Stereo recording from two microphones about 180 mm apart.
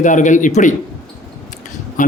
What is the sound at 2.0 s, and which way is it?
Speech, 45° left (ahead or behind).